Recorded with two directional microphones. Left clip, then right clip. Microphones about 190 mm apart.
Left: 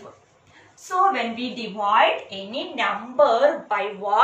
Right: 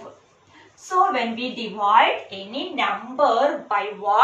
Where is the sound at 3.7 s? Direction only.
15° right (ahead or behind).